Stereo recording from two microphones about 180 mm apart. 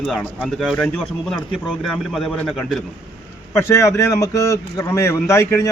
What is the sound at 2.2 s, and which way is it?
Speech, centre (ahead or behind).